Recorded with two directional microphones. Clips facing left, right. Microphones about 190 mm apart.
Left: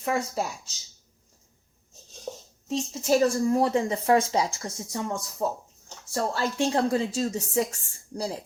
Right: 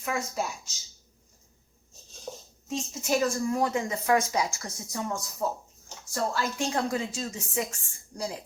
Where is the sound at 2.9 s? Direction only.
35° left (ahead or behind).